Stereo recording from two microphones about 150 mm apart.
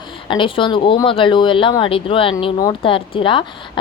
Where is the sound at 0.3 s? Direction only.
35° left (ahead or behind).